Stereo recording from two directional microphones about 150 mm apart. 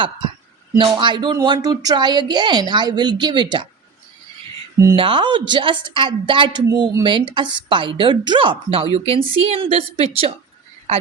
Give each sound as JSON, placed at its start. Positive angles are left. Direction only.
{"t": 0.8, "sound": "speech", "side_deg": -30}
{"t": 4.9, "sound": "a woman's voice", "side_deg": -35}